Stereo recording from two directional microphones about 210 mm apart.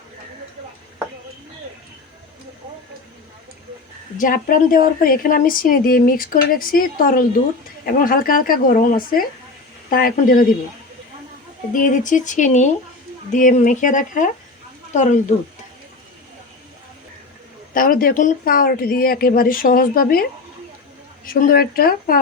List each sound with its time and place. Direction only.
4.2 s a woman's voice: 40° left (ahead or behind)
11.7 s speech: 40° left (ahead or behind)
17.7 s a woman's voice: 40° left (ahead or behind)
21.2 s a woman's voice: 45° left (ahead or behind)